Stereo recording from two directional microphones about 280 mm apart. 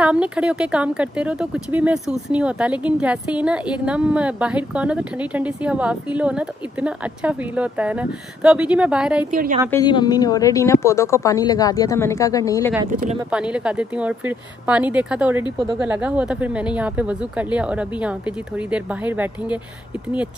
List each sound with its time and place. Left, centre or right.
0.0 s speech: centre
9.3 s a woman's voice: right
9.7 s a woman's voice: centre
12.9 s a woman's voice: right
13.3 s speech: centre